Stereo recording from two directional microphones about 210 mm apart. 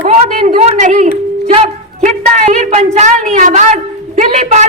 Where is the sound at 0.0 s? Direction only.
30° right (ahead or behind).